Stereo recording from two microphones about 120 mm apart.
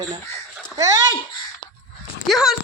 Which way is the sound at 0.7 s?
30° right (ahead or behind).